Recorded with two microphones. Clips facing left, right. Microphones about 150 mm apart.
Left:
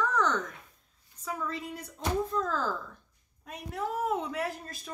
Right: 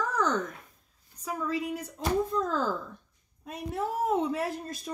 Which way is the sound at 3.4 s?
25° right (ahead or behind).